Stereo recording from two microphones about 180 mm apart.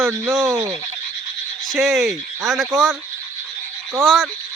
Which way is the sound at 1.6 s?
Centre (ahead or behind).